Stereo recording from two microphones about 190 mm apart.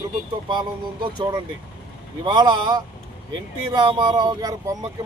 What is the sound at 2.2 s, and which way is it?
Speech, 25° right (ahead or behind).